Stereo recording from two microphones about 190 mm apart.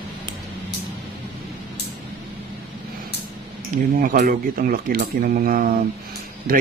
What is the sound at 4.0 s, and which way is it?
Speech, 50° right (ahead or behind).